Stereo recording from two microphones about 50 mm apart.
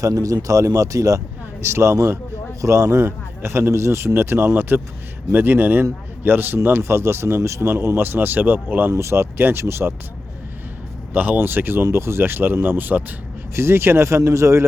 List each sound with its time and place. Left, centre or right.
0.1 s speech: right
1.6 s speech: right
5.3 s speech: right
6.8 s speech: right
7.9 s speech: right
8.9 s speech: right
9.4 s speech: right
11.1 s speech: right
11.3 s speech: right
13.6 s speech: right